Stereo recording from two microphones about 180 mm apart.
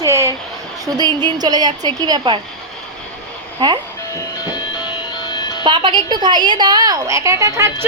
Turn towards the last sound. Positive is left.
turn(degrees=-15)  # may be behind; listen again after turning